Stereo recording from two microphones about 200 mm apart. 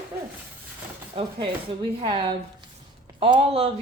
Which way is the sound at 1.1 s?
25° right (ahead or behind).